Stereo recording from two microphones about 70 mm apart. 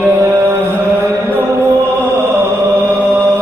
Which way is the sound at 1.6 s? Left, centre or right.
Right.